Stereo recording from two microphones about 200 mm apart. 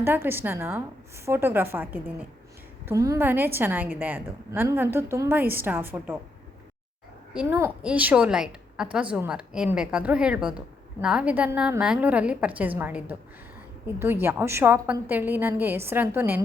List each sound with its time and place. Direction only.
0.0 s a woman's voice: 10° right (ahead or behind)
7.3 s a woman's voice: 10° right (ahead or behind)